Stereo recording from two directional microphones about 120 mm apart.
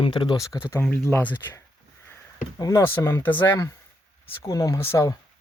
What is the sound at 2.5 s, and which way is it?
Speech, 30° left (ahead or behind).